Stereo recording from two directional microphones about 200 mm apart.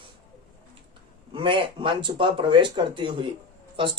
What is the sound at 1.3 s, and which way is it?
Speech, 25° right (ahead or behind).